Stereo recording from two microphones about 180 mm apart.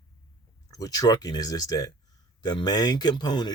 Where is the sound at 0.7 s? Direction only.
20° left (ahead or behind).